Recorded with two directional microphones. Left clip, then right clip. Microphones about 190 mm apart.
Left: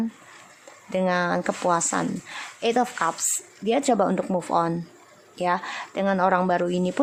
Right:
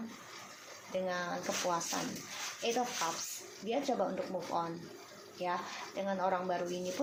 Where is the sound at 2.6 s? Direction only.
40° left (ahead or behind).